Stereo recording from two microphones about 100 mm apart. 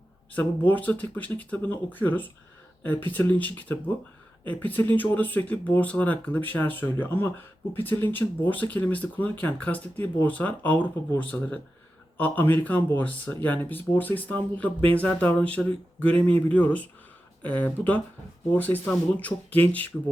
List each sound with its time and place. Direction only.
0.3 s speech: 15° left (ahead or behind)